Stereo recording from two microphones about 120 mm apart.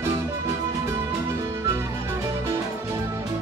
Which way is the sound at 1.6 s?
20° right (ahead or behind).